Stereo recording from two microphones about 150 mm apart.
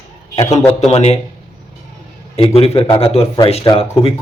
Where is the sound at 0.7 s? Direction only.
45° left (ahead or behind).